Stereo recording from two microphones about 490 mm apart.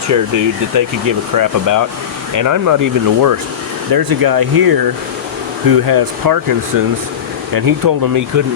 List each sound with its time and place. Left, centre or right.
0.1 s speech: right